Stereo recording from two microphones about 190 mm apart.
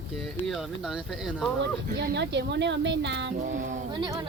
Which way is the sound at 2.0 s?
65° right (ahead or behind).